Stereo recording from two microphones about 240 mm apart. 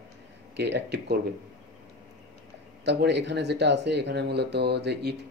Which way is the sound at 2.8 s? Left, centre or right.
Right.